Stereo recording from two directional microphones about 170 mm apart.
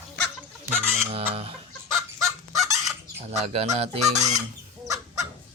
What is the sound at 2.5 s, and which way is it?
Fowl, centre (ahead or behind).